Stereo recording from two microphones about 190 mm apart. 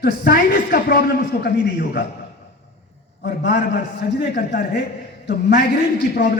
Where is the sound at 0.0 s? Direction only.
55° left (ahead or behind).